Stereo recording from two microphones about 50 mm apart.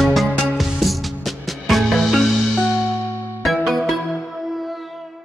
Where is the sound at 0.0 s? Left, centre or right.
Centre.